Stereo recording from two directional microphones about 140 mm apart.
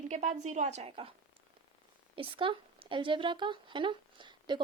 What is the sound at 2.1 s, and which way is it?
Speech, 40° right (ahead or behind).